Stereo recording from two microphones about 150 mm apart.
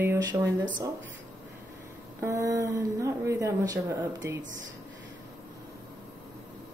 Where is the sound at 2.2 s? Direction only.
20° right (ahead or behind).